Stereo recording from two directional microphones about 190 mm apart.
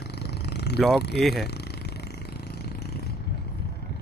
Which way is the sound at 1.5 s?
60° left (ahead or behind).